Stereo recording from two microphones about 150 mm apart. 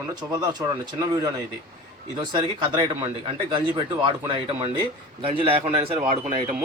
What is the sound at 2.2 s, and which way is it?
Speech, 30° right (ahead or behind).